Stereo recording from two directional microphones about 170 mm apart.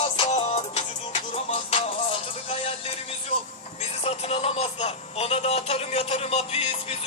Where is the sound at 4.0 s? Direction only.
35° left (ahead or behind).